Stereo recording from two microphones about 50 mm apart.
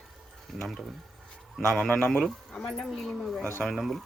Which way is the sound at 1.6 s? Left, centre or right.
Centre.